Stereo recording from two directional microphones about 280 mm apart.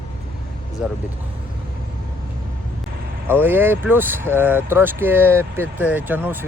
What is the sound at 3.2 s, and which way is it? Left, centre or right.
Speech, centre.